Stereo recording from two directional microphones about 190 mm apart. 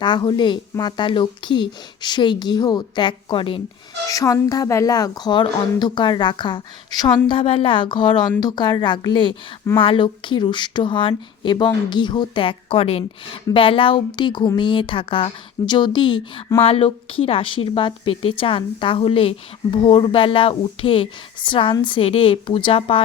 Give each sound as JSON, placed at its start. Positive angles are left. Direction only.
{"t": 0.0, "sound": "a woman's voice", "side_deg": 25}